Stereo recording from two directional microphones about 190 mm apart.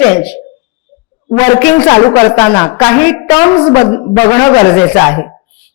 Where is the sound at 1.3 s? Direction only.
20° left (ahead or behind).